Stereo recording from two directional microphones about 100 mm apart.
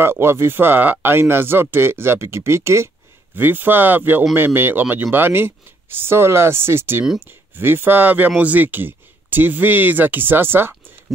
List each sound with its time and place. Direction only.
0.0 s speech: 25° right (ahead or behind)